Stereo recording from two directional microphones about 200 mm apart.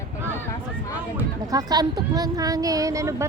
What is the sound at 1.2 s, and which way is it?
Speech, 20° right (ahead or behind).